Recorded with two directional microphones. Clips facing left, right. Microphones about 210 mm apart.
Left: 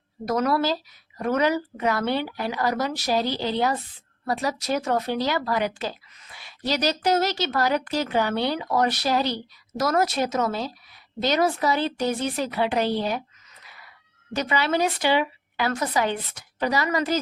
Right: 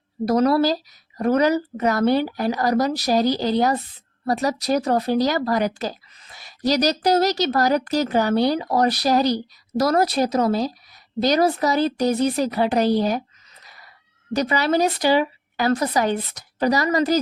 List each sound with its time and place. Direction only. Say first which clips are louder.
0.3 s speech: right 5 dB; 35° right (ahead or behind)